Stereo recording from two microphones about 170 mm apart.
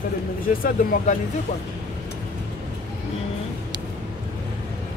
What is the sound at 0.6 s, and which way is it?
Speech, 55° left (ahead or behind).